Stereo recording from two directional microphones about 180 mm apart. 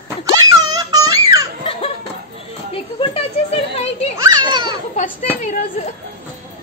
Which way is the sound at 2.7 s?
30° left (ahead or behind).